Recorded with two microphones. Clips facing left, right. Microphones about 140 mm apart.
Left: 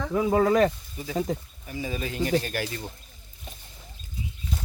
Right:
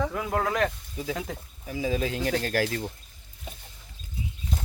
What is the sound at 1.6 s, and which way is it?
Speech, 90° right.